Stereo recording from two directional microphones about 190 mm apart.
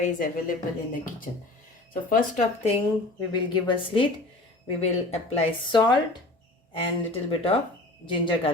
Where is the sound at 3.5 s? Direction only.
25° left (ahead or behind).